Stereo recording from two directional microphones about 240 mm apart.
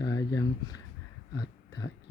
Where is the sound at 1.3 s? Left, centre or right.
Centre.